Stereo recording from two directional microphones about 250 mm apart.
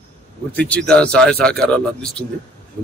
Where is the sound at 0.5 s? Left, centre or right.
Centre.